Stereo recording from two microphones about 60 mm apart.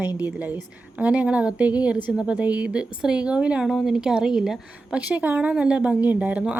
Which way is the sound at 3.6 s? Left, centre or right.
Centre.